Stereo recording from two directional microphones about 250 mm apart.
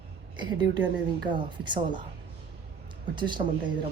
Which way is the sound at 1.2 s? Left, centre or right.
Centre.